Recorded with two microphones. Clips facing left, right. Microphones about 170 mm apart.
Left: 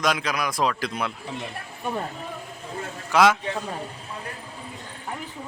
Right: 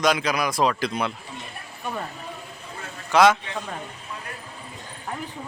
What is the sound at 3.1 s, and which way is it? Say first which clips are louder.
Speech: right 2 dB; 5° left (ahead or behind).